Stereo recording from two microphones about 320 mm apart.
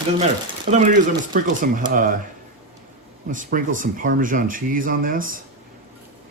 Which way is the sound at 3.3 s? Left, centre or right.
Right.